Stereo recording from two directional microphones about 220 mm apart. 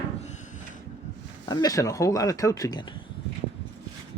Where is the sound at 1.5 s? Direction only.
15° left (ahead or behind).